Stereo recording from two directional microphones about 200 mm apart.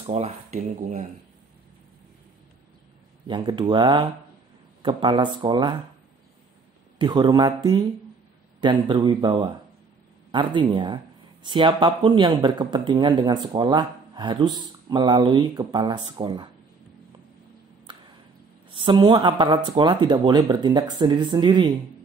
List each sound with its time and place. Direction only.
0.0 s speech: 30° right (ahead or behind)
3.3 s speech: 25° right (ahead or behind)
7.0 s speech: 20° right (ahead or behind)
17.9 s tick: 20° right (ahead or behind)
18.7 s speech: 25° right (ahead or behind)